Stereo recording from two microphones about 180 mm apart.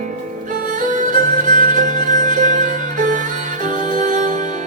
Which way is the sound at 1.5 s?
45° right (ahead or behind).